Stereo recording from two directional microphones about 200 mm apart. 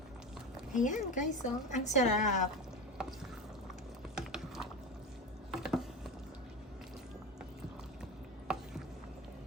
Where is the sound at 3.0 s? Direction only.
5° right (ahead or behind).